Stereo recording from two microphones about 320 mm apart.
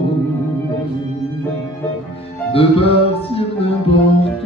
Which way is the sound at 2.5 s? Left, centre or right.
Centre.